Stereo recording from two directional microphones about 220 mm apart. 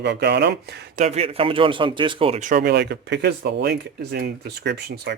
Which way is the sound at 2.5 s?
45° right (ahead or behind).